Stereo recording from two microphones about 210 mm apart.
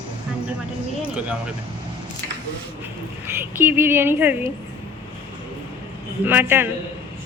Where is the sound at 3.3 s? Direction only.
10° right (ahead or behind).